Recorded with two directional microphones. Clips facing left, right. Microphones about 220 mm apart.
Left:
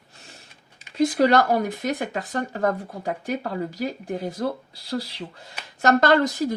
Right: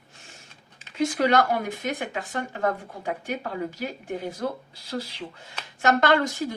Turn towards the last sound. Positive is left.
turn(degrees=40)  # may be behind; listen again after turning